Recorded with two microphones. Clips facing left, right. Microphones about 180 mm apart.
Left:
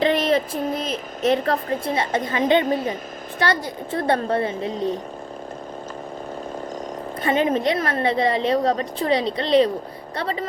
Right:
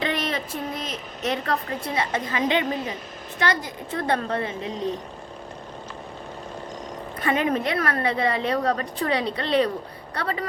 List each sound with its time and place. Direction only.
0.0 s a sound: 35° left (ahead or behind)
0.9 s a woman's voice: 35° left (ahead or behind)
7.2 s a woman's voice: 25° left (ahead or behind)